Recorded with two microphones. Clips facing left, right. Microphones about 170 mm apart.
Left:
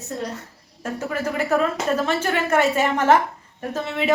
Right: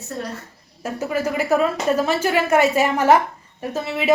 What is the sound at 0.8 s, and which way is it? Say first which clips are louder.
Speech: right 3 dB; 10° right (ahead or behind).